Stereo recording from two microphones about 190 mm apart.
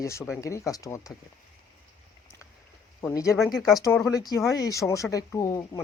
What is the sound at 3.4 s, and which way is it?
Speech, centre (ahead or behind).